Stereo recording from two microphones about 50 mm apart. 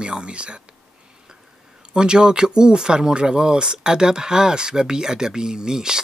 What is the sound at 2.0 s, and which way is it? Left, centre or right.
Speech, centre.